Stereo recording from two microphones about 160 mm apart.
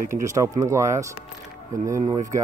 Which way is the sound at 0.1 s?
20° right (ahead or behind).